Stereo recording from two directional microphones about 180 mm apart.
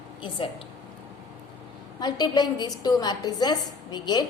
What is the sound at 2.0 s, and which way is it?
A woman's voice, 25° left (ahead or behind).